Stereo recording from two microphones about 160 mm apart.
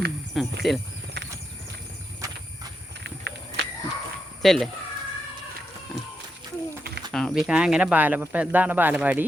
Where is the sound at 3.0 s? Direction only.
90° right.